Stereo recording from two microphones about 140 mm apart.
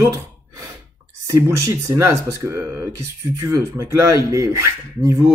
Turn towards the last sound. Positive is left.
turn(degrees=-20)  # may be behind; listen again after turning